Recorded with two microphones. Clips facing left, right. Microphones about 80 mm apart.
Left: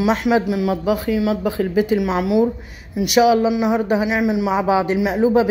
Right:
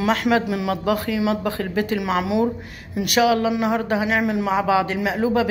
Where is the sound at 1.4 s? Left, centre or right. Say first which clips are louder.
Left 5 dB; centre.